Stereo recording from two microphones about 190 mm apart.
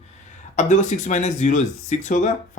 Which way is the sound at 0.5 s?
40° left (ahead or behind).